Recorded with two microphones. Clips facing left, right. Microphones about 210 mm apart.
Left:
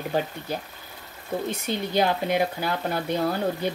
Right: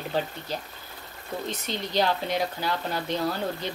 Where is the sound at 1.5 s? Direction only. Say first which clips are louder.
Left 4 dB; 10° left (ahead or behind).